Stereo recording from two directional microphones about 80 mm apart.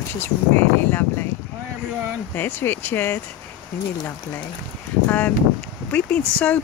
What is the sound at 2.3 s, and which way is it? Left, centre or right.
Speech, left.